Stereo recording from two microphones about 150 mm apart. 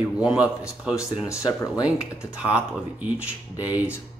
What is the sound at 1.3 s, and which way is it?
Speech, 25° left (ahead or behind).